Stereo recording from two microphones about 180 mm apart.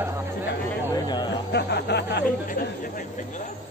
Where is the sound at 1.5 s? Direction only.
70° left (ahead or behind).